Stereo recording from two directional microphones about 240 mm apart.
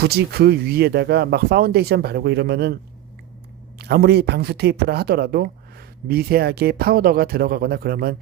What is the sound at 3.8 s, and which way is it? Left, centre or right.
Speech, right.